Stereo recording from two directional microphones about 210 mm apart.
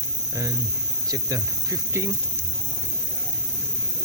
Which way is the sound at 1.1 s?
15° right (ahead or behind).